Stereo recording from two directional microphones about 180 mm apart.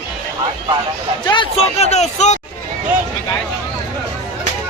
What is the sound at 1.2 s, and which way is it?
A man's voice, 25° left (ahead or behind).